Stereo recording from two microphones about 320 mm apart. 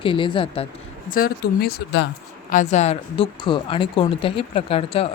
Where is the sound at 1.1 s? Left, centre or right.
Left.